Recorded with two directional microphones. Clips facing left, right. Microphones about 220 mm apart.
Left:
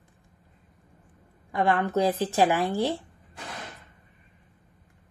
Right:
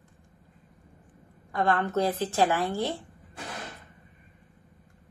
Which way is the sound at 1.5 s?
15° left (ahead or behind).